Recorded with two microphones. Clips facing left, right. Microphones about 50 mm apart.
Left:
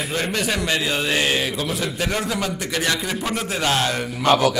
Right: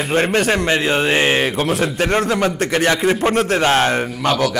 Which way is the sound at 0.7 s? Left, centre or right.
Right.